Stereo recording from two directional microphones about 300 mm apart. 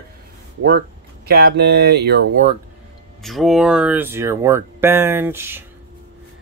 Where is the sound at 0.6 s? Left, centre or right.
Right.